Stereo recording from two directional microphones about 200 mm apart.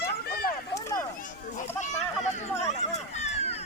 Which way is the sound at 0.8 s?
15° left (ahead or behind).